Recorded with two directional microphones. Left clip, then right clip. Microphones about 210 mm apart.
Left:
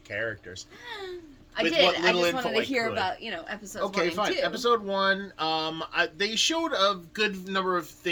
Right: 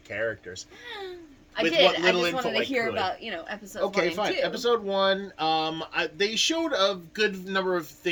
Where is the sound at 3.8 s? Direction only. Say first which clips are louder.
Right 1 dB; 10° right (ahead or behind).